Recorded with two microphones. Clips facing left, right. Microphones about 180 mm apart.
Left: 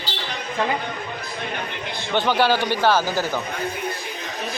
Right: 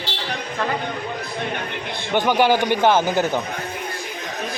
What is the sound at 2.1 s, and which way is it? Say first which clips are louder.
Speech: right 2 dB; 15° right (ahead or behind).